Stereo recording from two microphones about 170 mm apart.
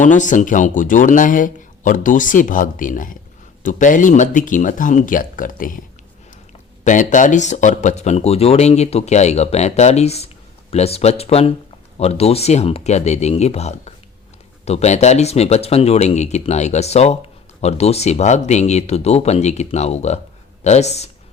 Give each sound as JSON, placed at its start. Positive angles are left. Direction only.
{"t": 0.0, "sound": "speech", "side_deg": 45}
{"t": 6.8, "sound": "speech", "side_deg": 50}